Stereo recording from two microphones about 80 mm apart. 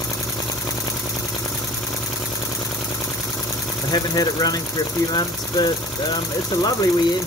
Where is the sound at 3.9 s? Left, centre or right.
Left.